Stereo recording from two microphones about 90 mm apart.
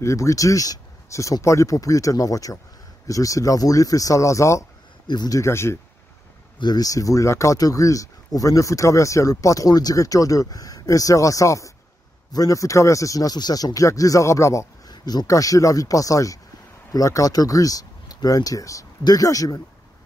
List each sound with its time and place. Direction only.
0.0 s speech: 35° left (ahead or behind)
5.0 s speech: 50° left (ahead or behind)
5.4 s speech: 30° left (ahead or behind)
6.6 s speech: 50° left (ahead or behind)
14.9 s a sound: 50° left (ahead or behind)
15.2 s speech: 40° left (ahead or behind)